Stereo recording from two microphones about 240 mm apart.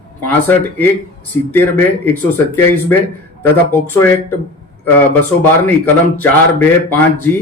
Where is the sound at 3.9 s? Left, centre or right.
Centre.